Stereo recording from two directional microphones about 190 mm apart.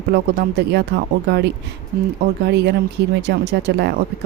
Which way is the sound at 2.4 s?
60° right (ahead or behind).